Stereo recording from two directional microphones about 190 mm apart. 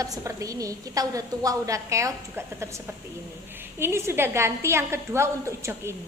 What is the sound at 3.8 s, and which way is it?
A woman's voice, 15° right (ahead or behind).